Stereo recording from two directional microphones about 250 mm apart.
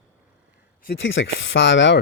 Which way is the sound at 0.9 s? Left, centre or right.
Left.